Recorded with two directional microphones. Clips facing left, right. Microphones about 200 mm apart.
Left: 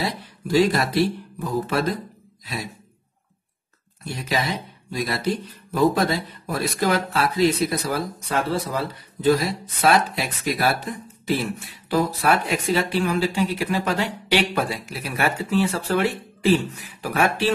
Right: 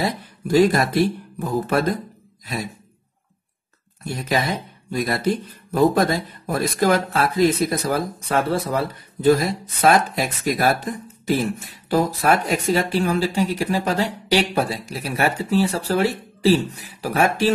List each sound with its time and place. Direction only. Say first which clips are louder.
0.0 s speech: right 3 dB; 50° right (ahead or behind)
4.1 s speech: right 3 dB; 50° right (ahead or behind)
9.2 s speech: right 3 dB; 50° right (ahead or behind)